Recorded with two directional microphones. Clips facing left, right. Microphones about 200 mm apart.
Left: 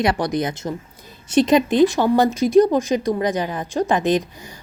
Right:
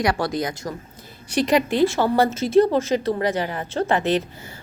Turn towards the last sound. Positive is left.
turn(degrees=15)  # may be behind; listen again after turning